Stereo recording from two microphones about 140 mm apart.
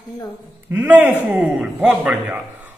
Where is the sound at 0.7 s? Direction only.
15° right (ahead or behind).